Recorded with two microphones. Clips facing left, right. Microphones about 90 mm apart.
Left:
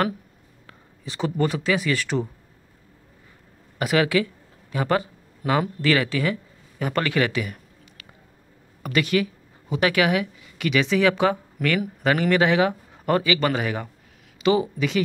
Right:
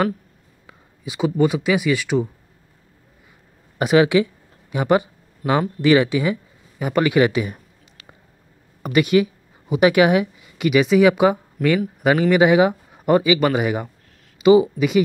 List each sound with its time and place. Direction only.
0.7 s speech: 10° right (ahead or behind)
3.7 s a sound: 20° right (ahead or behind)
5.8 s speech: 20° right (ahead or behind)
6.8 s a sound: 15° right (ahead or behind)
8.8 s a woman's voice: 20° right (ahead or behind)
11.6 s speech: 5° left (ahead or behind)
12.0 s speech: 15° right (ahead or behind)